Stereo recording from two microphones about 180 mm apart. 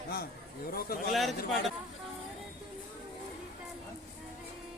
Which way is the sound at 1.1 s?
Centre (ahead or behind).